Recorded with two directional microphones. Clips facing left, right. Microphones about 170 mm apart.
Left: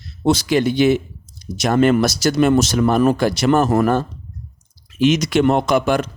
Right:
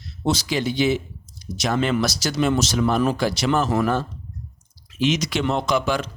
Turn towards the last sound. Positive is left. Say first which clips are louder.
# left 5 dB
turn(degrees=55)  # may be behind; listen again after turning